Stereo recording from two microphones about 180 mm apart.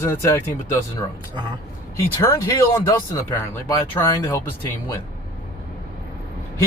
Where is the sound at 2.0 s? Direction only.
15° left (ahead or behind).